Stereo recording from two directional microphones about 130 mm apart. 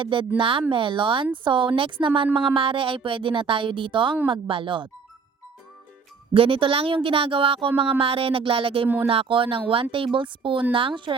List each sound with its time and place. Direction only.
0.0 s speech: 40° right (ahead or behind)
6.3 s speech: 45° right (ahead or behind)